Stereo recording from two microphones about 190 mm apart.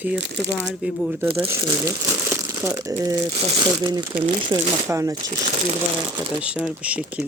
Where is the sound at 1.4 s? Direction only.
15° right (ahead or behind).